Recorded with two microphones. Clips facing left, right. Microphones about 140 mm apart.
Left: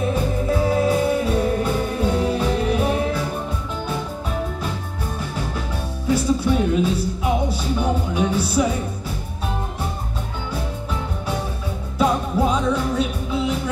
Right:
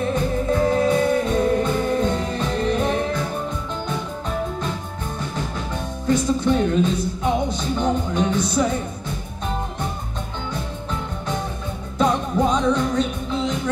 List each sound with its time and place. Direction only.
0.1 s music: 5° left (ahead or behind)
6.0 s music: 10° left (ahead or behind)
12.0 s music: 5° left (ahead or behind)